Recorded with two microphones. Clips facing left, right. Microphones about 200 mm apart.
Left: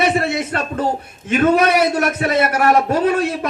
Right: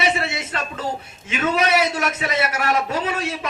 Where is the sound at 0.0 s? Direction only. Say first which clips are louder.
Left 6 dB; 55° left (ahead or behind).